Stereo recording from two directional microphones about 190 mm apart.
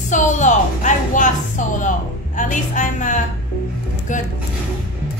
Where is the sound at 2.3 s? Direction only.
40° left (ahead or behind).